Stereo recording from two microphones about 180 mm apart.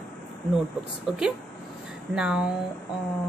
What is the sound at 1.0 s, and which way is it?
A woman's voice, 5° right (ahead or behind).